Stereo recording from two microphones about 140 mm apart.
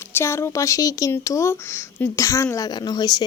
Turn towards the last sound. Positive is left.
turn(degrees=30)  # may be behind; listen again after turning